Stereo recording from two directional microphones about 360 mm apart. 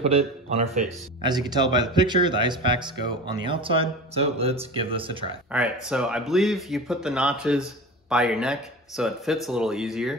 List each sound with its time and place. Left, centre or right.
0.0 s speech: centre
5.5 s speech: centre